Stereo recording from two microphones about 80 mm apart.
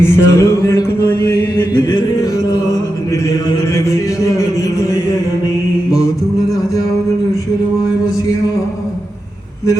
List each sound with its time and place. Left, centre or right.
0.0 s music: left
1.8 s music: left
3.8 s a sound: left